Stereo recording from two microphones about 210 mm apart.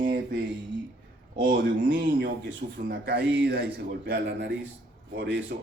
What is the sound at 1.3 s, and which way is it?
Speech, 40° right (ahead or behind).